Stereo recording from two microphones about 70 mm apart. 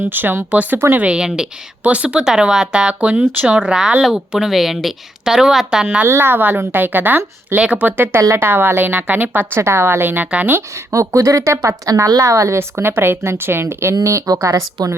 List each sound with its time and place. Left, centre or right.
0.0 s a woman's voice: right
0.9 s speech: centre
6.1 s a woman's voice: right
9.6 s a woman's voice: right
10.8 s a woman's voice: right
12.0 s a woman's voice: right